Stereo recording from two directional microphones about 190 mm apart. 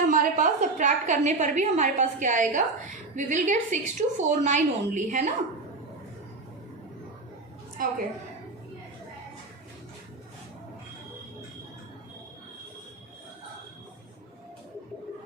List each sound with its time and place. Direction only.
0.0 s a woman's voice: 45° right (ahead or behind)
7.8 s a woman's voice: 50° right (ahead or behind)